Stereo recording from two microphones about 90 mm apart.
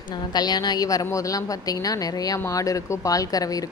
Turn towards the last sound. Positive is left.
turn(degrees=40)  # may be behind; listen again after turning